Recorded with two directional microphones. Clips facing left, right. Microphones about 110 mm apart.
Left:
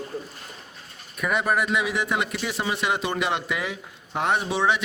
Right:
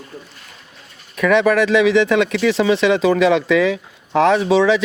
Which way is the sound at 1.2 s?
90° right.